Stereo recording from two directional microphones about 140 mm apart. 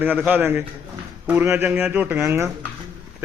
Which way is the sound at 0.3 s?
15° right (ahead or behind).